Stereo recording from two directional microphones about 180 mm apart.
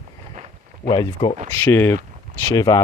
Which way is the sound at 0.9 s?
25° left (ahead or behind).